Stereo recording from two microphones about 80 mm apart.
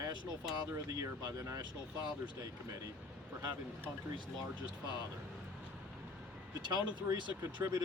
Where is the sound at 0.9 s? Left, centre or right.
Right.